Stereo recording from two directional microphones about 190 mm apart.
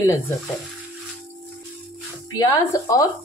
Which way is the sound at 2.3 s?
20° left (ahead or behind).